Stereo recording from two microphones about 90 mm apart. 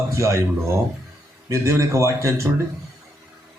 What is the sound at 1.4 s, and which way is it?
A man's voice, 35° right (ahead or behind).